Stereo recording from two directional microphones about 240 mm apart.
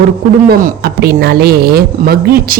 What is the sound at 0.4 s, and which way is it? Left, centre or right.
A woman's voice, right.